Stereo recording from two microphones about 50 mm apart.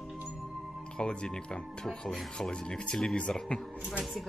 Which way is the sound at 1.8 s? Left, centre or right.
Centre.